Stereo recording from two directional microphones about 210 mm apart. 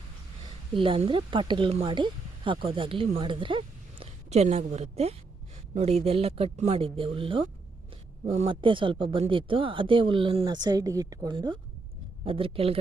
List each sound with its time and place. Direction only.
0.7 s speech: 25° right (ahead or behind)